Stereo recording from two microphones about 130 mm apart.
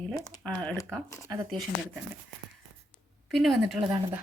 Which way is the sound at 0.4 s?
5° left (ahead or behind).